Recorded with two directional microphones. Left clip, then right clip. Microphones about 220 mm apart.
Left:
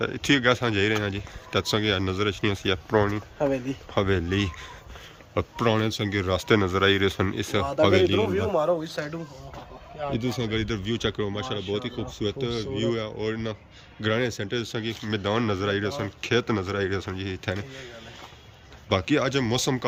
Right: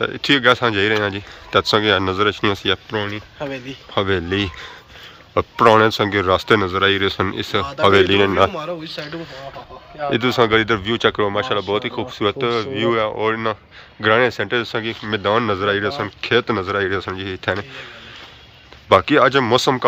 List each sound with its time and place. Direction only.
0.0 s speech: 10° left (ahead or behind)
2.9 s speech: 25° left (ahead or behind)
3.4 s speech: 55° left (ahead or behind)
3.9 s speech: 10° left (ahead or behind)
8.5 s a man's voice: 40° left (ahead or behind)
10.2 s speech: centre (ahead or behind)
18.9 s speech: 5° left (ahead or behind)